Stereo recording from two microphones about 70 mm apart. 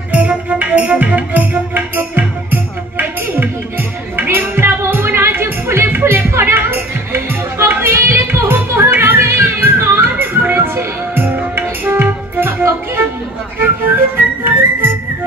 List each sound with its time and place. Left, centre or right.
0.1 s music: centre
4.6 s music: right